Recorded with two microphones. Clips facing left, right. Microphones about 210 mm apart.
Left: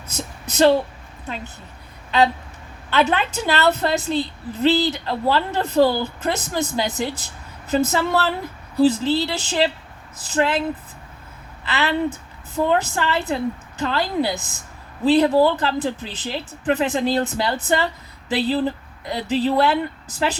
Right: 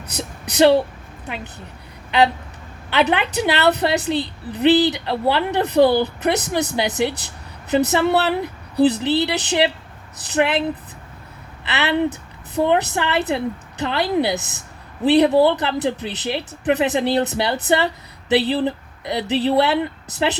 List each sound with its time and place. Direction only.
0.1 s speech: 15° right (ahead or behind)
2.0 s a woman's voice: 15° right (ahead or behind)
11.6 s a woman's voice: 20° right (ahead or behind)